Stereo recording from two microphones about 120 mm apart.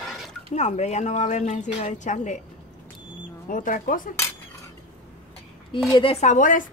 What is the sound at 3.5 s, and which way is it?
Speech, 90° left.